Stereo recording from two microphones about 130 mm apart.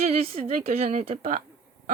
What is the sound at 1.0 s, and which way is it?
Speech, 55° right (ahead or behind).